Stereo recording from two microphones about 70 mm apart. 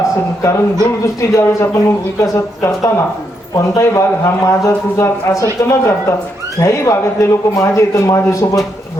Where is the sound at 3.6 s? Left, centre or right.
Left.